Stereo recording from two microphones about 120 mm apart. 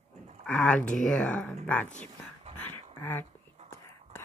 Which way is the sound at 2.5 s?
15° left (ahead or behind).